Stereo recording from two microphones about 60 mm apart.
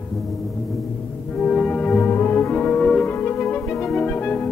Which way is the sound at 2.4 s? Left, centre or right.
Centre.